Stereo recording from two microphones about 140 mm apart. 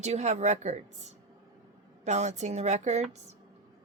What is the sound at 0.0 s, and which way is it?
Speech, 55° right (ahead or behind).